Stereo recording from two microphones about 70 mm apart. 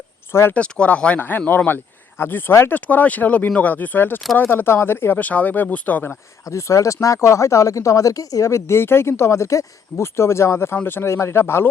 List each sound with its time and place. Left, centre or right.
0.3 s speech: left
0.5 s speech: centre
6.4 s speech: left